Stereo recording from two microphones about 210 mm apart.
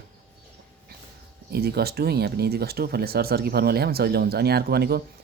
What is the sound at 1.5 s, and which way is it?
Speech, 50° right (ahead or behind).